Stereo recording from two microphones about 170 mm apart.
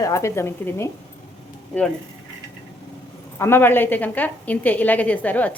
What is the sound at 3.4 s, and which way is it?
A woman's voice, 15° left (ahead or behind).